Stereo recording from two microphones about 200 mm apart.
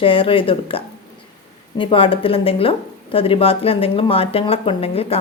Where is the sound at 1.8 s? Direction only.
25° left (ahead or behind).